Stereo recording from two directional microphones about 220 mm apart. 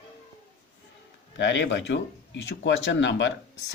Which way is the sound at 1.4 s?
55° left (ahead or behind).